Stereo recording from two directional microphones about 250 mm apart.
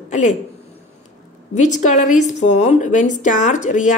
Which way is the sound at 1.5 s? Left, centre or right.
Left.